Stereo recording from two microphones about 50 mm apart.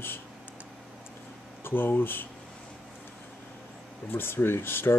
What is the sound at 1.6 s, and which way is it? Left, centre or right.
Speech, left.